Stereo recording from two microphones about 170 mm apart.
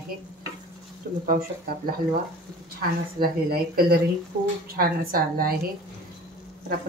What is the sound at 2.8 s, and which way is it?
Speech, 60° right (ahead or behind).